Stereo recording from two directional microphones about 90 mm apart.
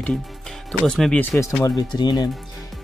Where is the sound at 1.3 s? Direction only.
15° left (ahead or behind).